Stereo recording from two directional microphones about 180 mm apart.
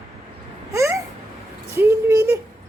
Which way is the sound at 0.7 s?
15° right (ahead or behind).